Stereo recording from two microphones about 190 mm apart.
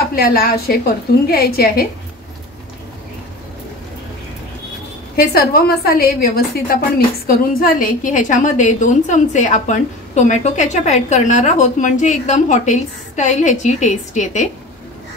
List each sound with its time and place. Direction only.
0.1 s a woman's voice: 50° left (ahead or behind)
5.1 s a woman's voice: 55° left (ahead or behind)